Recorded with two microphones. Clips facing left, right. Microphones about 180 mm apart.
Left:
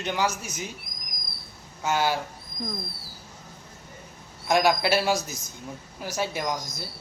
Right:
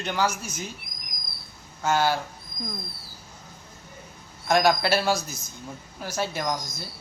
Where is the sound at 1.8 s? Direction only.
15° left (ahead or behind).